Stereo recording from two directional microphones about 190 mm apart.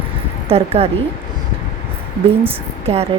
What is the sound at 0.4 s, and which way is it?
Speech, 30° right (ahead or behind).